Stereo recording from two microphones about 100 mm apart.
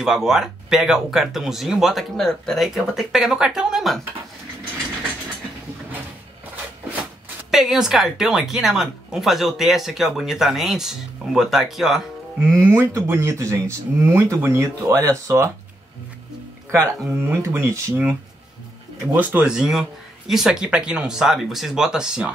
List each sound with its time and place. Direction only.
0.0 s speech: 5° right (ahead or behind)
7.5 s speech: 5° right (ahead or behind)
12.5 s speech: 25° right (ahead or behind)
17.1 s speech: 25° right (ahead or behind)
19.1 s speech: 15° right (ahead or behind)